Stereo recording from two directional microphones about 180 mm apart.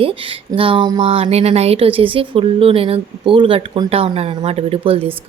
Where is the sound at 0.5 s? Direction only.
30° right (ahead or behind).